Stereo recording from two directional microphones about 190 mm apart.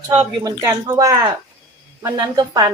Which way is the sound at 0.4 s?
20° right (ahead or behind).